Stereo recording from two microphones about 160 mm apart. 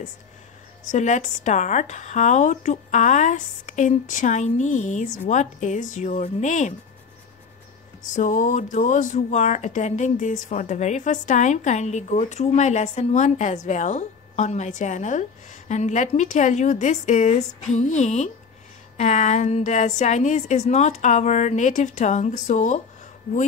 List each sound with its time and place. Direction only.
0.8 s speech: 50° left (ahead or behind)
8.1 s speech: 55° left (ahead or behind)